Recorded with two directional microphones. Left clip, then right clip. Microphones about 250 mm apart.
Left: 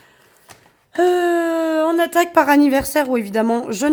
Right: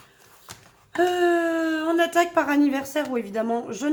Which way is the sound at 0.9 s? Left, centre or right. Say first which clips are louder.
Left 5 dB; left.